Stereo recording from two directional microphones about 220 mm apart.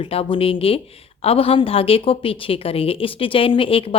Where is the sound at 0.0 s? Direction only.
25° left (ahead or behind).